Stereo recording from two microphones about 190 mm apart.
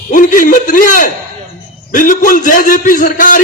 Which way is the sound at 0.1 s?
45° left (ahead or behind).